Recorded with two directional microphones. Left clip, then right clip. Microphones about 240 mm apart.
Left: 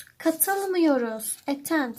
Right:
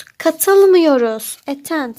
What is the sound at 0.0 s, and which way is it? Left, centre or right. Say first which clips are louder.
A woman's voice: right 10 dB; right.